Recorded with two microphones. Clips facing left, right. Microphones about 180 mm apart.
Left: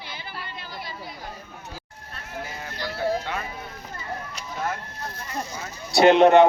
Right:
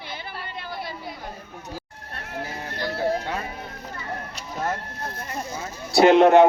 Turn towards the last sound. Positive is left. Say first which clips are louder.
# right 1 dB
turn(degrees=-5)  # may be behind; listen again after turning